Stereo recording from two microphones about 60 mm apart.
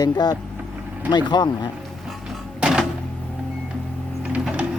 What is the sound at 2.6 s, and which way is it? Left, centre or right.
Music, centre.